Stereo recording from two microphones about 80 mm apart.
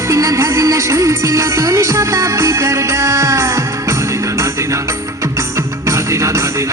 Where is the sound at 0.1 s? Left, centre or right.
Right.